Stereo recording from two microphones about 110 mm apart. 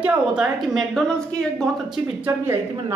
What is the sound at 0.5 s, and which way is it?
Speech, centre (ahead or behind).